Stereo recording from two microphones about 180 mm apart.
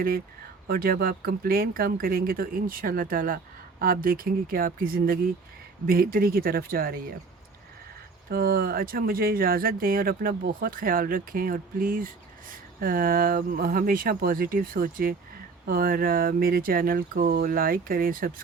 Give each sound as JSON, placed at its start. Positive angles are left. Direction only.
{"t": 0.7, "sound": "speech", "side_deg": -55}
{"t": 8.3, "sound": "speech", "side_deg": -55}